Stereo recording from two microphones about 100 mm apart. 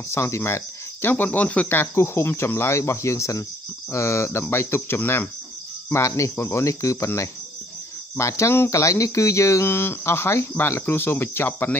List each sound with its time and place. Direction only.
0.1 s cricket: 25° left (ahead or behind)